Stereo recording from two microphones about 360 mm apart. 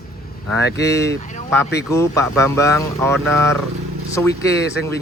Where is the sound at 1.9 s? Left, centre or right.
Centre.